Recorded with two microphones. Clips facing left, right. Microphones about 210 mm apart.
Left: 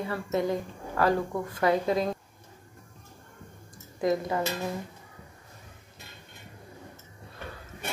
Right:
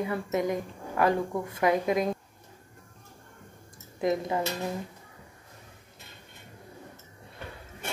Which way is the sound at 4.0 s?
20° right (ahead or behind).